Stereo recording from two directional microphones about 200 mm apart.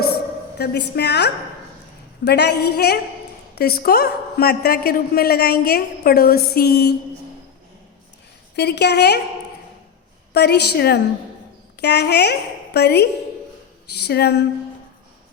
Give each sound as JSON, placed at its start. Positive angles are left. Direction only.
{"t": 0.6, "sound": "a woman's voice", "side_deg": 55}
{"t": 8.5, "sound": "a woman's voice", "side_deg": 55}
{"t": 10.3, "sound": "a woman's voice", "side_deg": 55}